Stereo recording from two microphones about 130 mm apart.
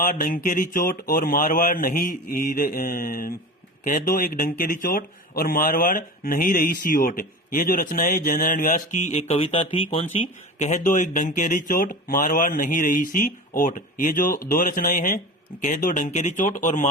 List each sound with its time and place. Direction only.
0.0 s speech: 90° left; by 16.9 s 75° left (ahead or behind)